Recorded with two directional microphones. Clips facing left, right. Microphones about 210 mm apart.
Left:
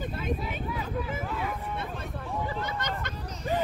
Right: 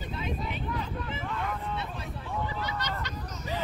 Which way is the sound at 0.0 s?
50° left (ahead or behind).